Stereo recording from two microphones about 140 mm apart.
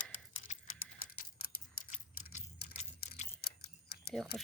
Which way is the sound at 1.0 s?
90° left.